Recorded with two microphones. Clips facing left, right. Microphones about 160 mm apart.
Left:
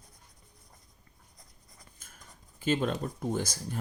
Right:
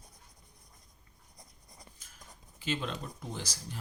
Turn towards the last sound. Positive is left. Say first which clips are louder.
# left 9 dB
turn(degrees=50)  # may be behind; listen again after turning